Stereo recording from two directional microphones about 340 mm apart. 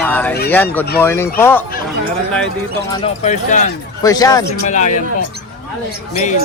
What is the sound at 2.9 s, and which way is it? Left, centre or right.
Speech, centre.